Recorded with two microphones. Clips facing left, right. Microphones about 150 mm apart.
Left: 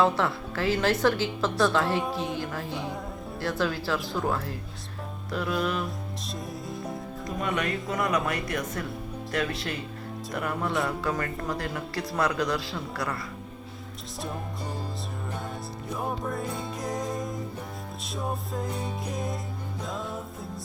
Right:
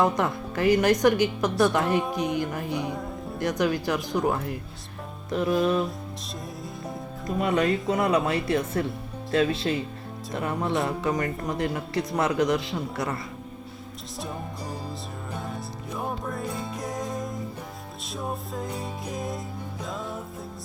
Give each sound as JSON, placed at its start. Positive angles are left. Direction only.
{"t": 0.0, "sound": "a woman's voice", "side_deg": -15}
{"t": 7.4, "sound": "a man's voice", "side_deg": -30}
{"t": 16.0, "sound": "music", "side_deg": 0}